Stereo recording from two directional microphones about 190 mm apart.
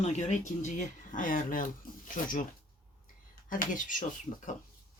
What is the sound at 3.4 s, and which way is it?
Speech, 45° left (ahead or behind).